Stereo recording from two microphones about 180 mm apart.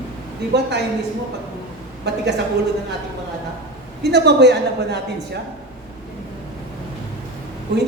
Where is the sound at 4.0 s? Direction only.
70° right (ahead or behind).